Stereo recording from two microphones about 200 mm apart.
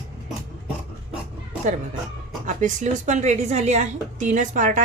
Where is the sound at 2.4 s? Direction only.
35° right (ahead or behind).